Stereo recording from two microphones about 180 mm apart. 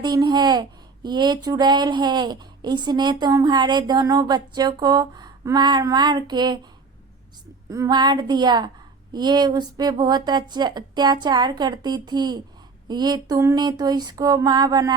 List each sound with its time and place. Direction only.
0.0 s speech: 25° right (ahead or behind)
7.7 s speech: 20° right (ahead or behind)